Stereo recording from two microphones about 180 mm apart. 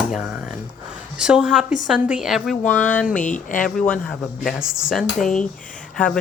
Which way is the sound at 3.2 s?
45° left (ahead or behind).